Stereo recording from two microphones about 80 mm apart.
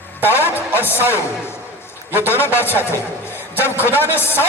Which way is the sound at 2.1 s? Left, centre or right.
Right.